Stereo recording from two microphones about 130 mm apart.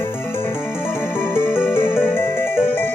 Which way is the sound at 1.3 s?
15° left (ahead or behind).